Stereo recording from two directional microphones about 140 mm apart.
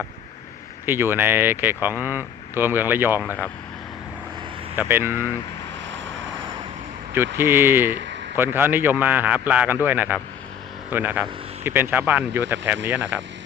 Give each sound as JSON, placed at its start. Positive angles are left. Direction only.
{"t": 0.9, "sound": "speech", "side_deg": -15}
{"t": 4.8, "sound": "speech", "side_deg": -15}
{"t": 7.1, "sound": "speech", "side_deg": -15}